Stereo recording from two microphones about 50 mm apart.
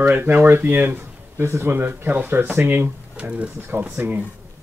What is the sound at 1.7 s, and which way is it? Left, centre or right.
Speech, right.